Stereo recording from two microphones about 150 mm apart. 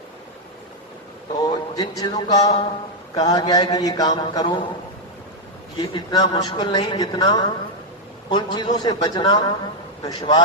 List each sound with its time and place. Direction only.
1.5 s a sound: 25° left (ahead or behind)
2.0 s a man's voice: 30° left (ahead or behind)
5.8 s a man's voice: 30° left (ahead or behind)